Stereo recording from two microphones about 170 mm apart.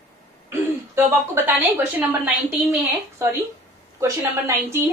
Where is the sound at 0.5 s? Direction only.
15° right (ahead or behind).